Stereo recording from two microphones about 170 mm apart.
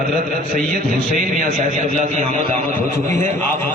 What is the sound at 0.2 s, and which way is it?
A man's voice, 50° right (ahead or behind).